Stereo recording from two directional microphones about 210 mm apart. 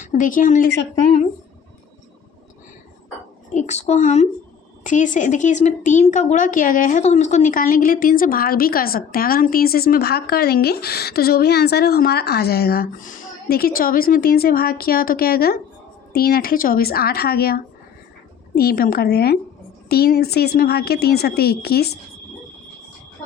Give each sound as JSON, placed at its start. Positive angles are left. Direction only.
{"t": 0.0, "sound": "speech", "side_deg": 35}
{"t": 3.5, "sound": "speech", "side_deg": 35}